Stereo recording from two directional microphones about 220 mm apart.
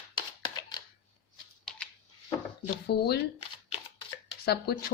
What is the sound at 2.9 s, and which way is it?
Speech, 45° left (ahead or behind).